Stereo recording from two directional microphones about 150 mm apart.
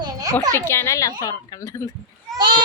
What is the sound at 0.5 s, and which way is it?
A woman's voice, 15° left (ahead or behind).